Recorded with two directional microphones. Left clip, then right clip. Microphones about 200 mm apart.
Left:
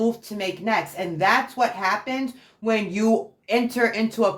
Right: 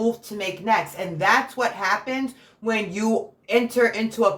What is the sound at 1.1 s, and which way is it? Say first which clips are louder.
Speech: even; 35° left (ahead or behind).